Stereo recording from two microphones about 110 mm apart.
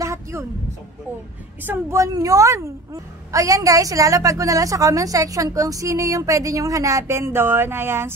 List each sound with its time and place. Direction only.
0.0 s a sound: 25° right (ahead or behind)
1.6 s speech: 20° right (ahead or behind)
2.1 s a woman's voice: 30° right (ahead or behind)